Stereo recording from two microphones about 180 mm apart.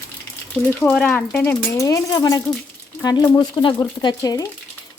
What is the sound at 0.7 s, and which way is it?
Speech, 10° left (ahead or behind).